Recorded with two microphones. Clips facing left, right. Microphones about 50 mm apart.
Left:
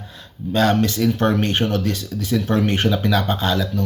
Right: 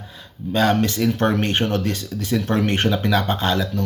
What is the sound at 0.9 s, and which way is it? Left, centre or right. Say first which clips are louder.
Speech: left 1 dB; right.